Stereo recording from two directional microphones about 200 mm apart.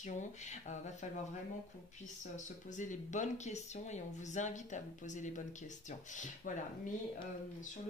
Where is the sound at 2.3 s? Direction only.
40° left (ahead or behind).